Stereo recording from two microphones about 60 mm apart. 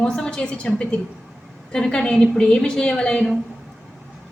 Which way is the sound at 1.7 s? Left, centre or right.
Centre.